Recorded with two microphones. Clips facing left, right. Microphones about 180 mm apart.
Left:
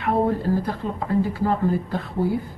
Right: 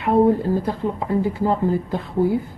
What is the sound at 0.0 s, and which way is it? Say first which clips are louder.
A woman's voice: right 5 dB; 25° right (ahead or behind).